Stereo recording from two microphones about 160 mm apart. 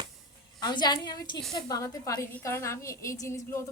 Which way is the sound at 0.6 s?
25° left (ahead or behind).